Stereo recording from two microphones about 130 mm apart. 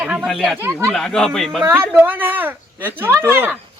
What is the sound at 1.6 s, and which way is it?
Speech, 15° right (ahead or behind).